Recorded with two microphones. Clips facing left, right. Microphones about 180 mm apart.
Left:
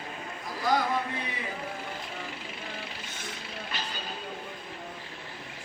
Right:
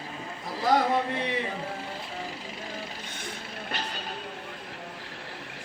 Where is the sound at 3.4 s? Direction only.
55° right (ahead or behind).